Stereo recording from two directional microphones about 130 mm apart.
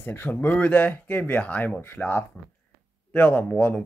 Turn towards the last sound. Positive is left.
turn(degrees=15)  # may be behind; listen again after turning